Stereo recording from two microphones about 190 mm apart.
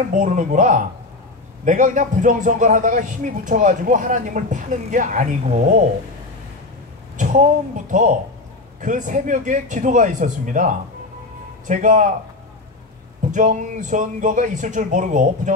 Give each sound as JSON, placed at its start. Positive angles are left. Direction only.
{"t": 0.1, "sound": "a man's voice", "side_deg": -40}
{"t": 7.2, "sound": "speech", "side_deg": -40}
{"t": 13.3, "sound": "speech", "side_deg": -40}